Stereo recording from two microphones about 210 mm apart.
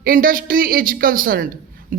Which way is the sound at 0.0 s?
45° right (ahead or behind).